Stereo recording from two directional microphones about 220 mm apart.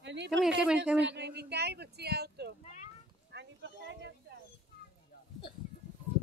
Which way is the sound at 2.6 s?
30° left (ahead or behind).